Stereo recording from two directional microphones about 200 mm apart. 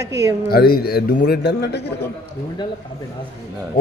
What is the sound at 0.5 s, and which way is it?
A man's voice, 50° left (ahead or behind).